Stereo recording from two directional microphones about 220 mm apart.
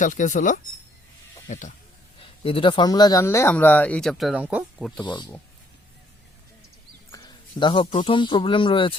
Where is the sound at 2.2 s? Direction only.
25° left (ahead or behind); by 4.9 s 5° right (ahead or behind).